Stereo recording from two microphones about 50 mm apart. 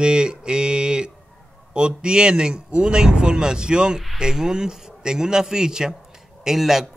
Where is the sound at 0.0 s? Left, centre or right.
Centre.